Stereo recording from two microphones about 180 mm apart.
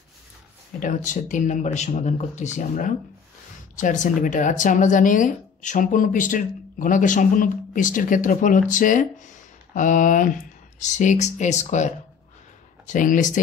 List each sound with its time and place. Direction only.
0.7 s speech: 45° left (ahead or behind)